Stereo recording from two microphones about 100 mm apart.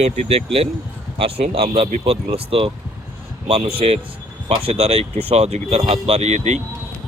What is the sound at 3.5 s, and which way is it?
Speech, 80° right.